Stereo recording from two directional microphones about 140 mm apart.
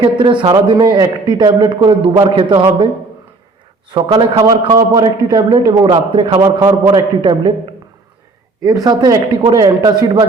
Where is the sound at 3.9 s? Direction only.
35° right (ahead or behind).